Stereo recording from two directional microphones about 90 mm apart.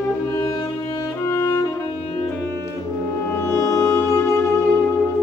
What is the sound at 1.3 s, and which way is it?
Music, 35° left (ahead or behind).